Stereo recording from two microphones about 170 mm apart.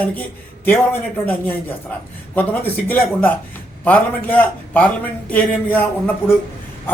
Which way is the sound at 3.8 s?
10° left (ahead or behind).